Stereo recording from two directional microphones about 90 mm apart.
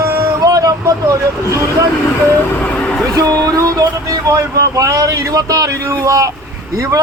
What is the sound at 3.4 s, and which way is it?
Speech, 40° right (ahead or behind).